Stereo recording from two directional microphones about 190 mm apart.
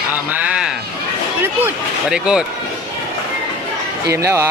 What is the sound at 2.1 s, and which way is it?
Speech, 5° right (ahead or behind).